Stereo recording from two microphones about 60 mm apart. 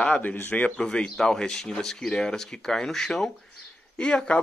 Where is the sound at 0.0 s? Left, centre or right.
Left.